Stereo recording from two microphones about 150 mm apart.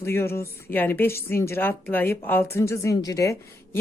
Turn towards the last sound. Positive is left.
turn(degrees=20)  # may be behind; listen again after turning